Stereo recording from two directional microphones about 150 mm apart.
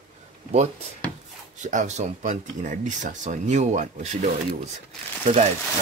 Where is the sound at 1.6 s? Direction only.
55° right (ahead or behind).